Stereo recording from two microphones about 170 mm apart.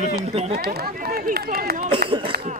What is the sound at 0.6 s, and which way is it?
Speech, 65° right (ahead or behind).